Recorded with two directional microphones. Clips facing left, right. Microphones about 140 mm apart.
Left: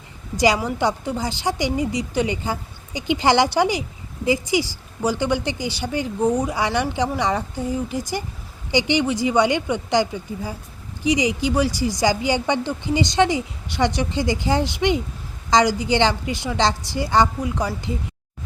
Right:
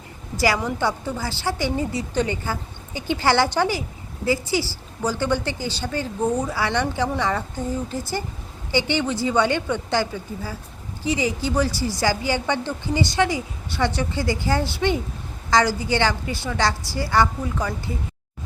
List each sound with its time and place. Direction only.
0.3 s a woman's voice: 20° left (ahead or behind)